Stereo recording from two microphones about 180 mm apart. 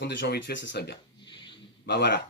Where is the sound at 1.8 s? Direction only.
70° left (ahead or behind).